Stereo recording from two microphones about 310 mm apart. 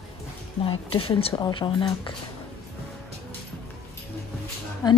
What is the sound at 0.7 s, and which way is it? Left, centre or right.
Speech, centre.